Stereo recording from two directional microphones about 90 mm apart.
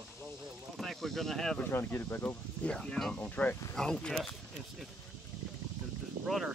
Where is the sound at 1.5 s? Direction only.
20° left (ahead or behind).